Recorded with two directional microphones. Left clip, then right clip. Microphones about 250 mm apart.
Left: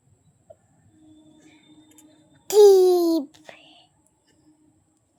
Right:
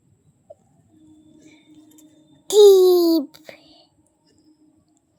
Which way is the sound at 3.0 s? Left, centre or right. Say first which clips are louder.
Right 4 dB; centre.